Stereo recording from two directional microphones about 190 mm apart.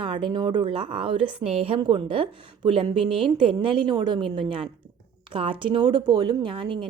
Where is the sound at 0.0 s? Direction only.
25° right (ahead or behind).